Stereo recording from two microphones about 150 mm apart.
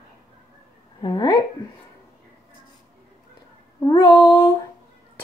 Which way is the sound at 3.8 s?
25° left (ahead or behind).